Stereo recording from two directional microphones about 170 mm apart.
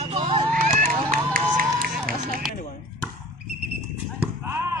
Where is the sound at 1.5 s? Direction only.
55° right (ahead or behind).